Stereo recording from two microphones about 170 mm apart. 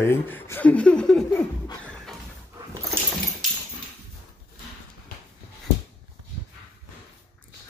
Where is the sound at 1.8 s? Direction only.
5° left (ahead or behind).